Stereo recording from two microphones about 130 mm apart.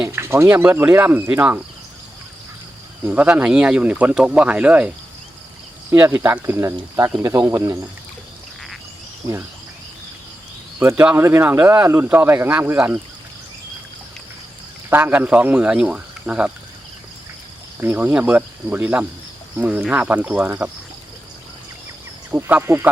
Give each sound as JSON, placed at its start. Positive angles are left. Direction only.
{"t": 0.0, "sound": "speech", "side_deg": -20}
{"t": 3.0, "sound": "speech", "side_deg": -15}
{"t": 5.9, "sound": "speech", "side_deg": -15}
{"t": 10.8, "sound": "speech", "side_deg": -15}
{"t": 14.8, "sound": "speech", "side_deg": -15}
{"t": 17.7, "sound": "speech", "side_deg": -15}
{"t": 22.3, "sound": "speech", "side_deg": -15}